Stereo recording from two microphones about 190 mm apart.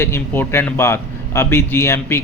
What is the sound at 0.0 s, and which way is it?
A man's voice, 15° left (ahead or behind).